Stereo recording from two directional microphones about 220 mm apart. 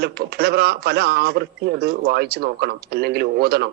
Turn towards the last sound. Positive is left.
turn(degrees=-45)  # may be behind; listen again after turning